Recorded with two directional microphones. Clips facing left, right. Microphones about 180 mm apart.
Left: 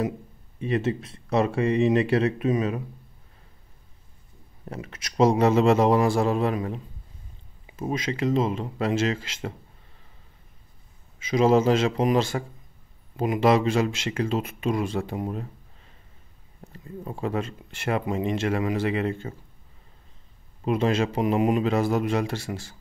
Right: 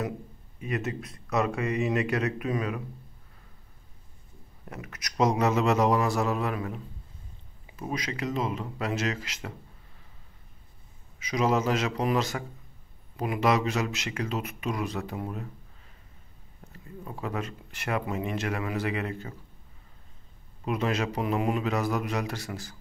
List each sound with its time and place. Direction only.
0.6 s speech: 30° left (ahead or behind)
4.6 s speech: 30° left (ahead or behind)
11.1 s speech: 25° left (ahead or behind)
16.6 s a sound: 30° left (ahead or behind)
17.0 s speech: 30° left (ahead or behind)
20.6 s speech: 30° left (ahead or behind)